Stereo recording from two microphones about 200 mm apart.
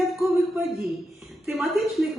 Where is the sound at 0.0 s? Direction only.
Centre (ahead or behind).